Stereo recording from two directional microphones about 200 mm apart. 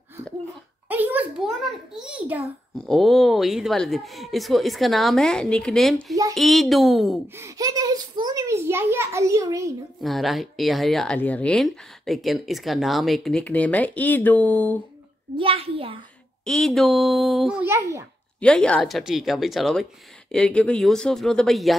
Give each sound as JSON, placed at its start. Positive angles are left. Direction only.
{"t": 0.2, "sound": "a child's voice", "side_deg": -15}
{"t": 0.8, "sound": "a sound", "side_deg": -10}
{"t": 2.0, "sound": "a child's voice", "side_deg": -5}
{"t": 7.3, "sound": "a child's voice", "side_deg": -15}
{"t": 10.0, "sound": "speech", "side_deg": 0}
{"t": 15.3, "sound": "a child's voice", "side_deg": -30}
{"t": 16.4, "sound": "speech", "side_deg": 0}
{"t": 18.4, "sound": "speech", "side_deg": 5}